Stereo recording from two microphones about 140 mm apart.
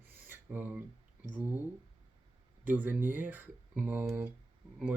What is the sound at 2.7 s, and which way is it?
Mantra, 10° right (ahead or behind).